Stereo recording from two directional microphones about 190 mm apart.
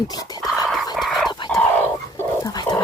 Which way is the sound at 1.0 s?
Centre (ahead or behind).